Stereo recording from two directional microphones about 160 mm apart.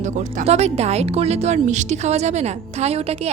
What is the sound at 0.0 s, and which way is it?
A woman's voice, 50° right (ahead or behind).